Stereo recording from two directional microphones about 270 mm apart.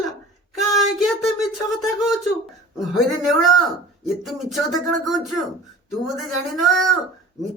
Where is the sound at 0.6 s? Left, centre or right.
Centre.